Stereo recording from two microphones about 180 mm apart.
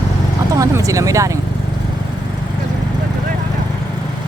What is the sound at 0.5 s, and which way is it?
Speech, 20° right (ahead or behind).